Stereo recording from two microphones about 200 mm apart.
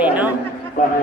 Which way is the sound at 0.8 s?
40° left (ahead or behind).